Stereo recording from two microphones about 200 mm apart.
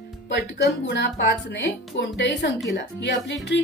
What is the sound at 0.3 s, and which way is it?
Speech, 55° left (ahead or behind).